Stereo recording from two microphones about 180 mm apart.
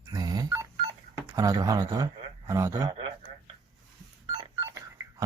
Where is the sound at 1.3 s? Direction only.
20° right (ahead or behind).